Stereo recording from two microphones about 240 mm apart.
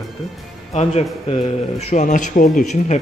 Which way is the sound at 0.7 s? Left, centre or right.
Left.